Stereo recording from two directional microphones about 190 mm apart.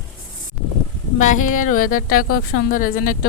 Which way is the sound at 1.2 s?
40° left (ahead or behind).